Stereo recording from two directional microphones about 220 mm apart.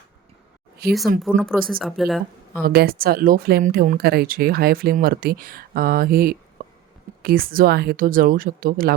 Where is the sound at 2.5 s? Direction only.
45° right (ahead or behind).